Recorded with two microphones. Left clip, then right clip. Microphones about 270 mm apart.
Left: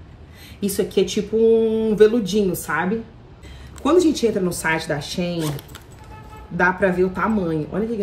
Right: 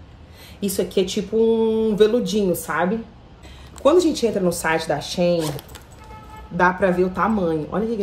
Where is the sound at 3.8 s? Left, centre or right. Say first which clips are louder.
Right 1 dB; centre.